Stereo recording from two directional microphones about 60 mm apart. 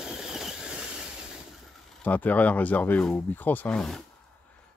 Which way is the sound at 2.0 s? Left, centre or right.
Left.